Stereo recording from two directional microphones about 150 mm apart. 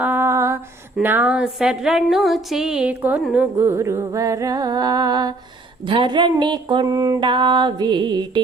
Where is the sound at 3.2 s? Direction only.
5° right (ahead or behind).